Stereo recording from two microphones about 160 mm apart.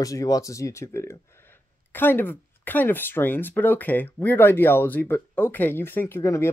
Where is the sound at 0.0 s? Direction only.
20° left (ahead or behind).